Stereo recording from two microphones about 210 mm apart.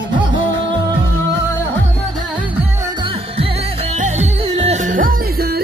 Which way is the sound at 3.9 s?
35° right (ahead or behind).